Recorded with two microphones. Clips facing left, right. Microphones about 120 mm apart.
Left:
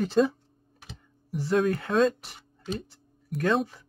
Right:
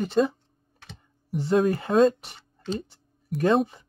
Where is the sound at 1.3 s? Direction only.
25° right (ahead or behind).